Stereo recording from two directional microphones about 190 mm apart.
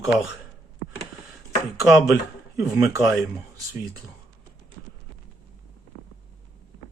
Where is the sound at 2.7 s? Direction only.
15° right (ahead or behind).